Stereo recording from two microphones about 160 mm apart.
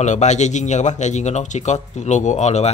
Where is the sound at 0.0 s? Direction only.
45° left (ahead or behind).